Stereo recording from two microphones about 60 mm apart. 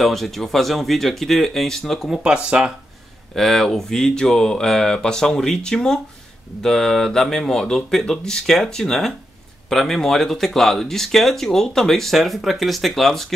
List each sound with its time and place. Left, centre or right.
0.0 s speech: centre
2.2 s speech: centre
3.3 s speech: centre